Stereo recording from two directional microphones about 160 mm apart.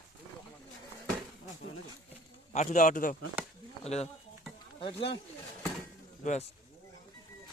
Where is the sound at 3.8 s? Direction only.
40° left (ahead or behind).